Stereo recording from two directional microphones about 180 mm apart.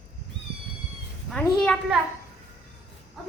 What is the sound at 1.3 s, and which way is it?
Speech, 5° left (ahead or behind).